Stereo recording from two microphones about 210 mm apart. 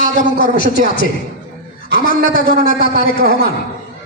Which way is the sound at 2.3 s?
40° left (ahead or behind).